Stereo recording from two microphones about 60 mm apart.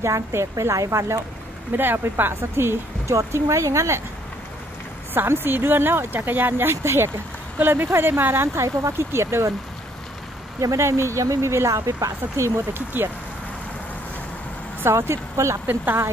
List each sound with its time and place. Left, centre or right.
0.0 s speech: right
1.8 s speech: right
3.2 s speech: right
5.1 s speech: right
8.5 s speech: right
10.6 s speech: right
12.7 s speech: right
14.9 s speech: right
15.6 s speech: right